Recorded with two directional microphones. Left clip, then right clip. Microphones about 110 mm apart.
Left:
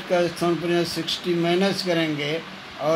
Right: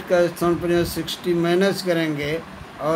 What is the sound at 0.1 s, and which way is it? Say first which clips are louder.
Speech: right 3 dB; 15° right (ahead or behind).